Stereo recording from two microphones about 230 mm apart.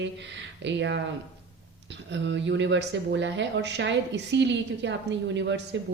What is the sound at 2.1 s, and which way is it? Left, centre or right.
A woman's voice, right.